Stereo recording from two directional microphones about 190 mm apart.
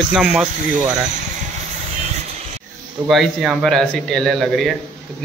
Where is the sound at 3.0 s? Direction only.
Centre (ahead or behind).